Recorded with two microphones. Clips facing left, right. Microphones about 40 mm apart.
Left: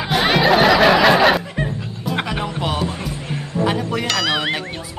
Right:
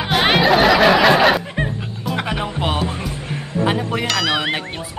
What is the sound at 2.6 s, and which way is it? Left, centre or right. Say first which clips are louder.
Music: right 2 dB; right.